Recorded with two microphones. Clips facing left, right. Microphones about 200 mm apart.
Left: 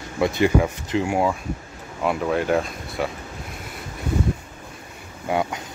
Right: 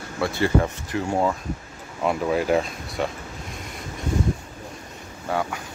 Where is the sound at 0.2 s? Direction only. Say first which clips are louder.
Left 3 dB; 15° left (ahead or behind).